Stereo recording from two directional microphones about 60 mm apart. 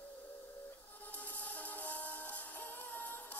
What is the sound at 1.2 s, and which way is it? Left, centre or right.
Music, left.